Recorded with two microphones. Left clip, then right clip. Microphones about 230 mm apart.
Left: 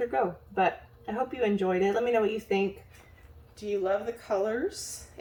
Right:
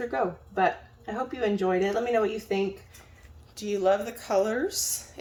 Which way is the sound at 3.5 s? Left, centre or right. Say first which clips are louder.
Right 4 dB; right.